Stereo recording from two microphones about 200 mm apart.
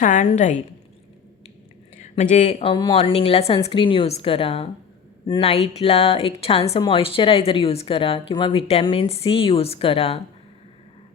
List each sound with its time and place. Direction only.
0.0 s a woman's voice: 40° left (ahead or behind)
2.3 s speech: 35° left (ahead or behind)